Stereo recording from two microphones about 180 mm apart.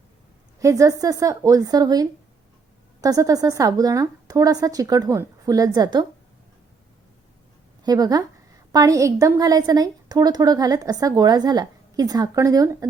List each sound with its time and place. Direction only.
0.6 s a woman's voice: 20° right (ahead or behind)
7.9 s a woman's voice: 20° right (ahead or behind)